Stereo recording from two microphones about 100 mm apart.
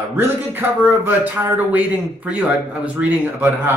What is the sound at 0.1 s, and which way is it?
Speech, 20° right (ahead or behind).